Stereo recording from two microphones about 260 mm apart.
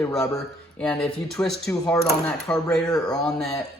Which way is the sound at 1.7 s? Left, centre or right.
Centre.